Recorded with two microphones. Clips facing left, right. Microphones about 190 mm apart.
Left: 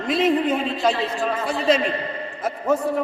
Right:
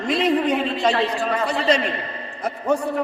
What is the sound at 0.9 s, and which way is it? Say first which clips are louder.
Speech: right 2 dB; 70° right (ahead or behind).